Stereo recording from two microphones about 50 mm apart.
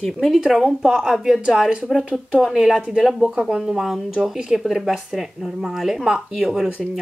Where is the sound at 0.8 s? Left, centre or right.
Centre.